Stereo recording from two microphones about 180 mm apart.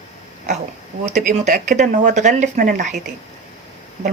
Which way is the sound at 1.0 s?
40° right (ahead or behind).